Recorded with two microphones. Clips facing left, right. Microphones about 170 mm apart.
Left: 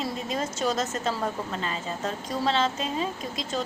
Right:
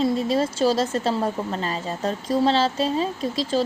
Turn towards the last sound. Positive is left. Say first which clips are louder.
# right 8 dB
turn(degrees=-30)  # may be behind; listen again after turning